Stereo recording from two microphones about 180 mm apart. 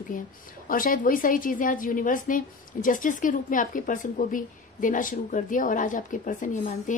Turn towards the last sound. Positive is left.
turn(degrees=45)  # may be behind; listen again after turning